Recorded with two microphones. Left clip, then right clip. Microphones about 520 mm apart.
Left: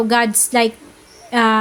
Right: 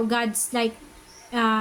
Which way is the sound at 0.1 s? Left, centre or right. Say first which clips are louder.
Left 10 dB; right.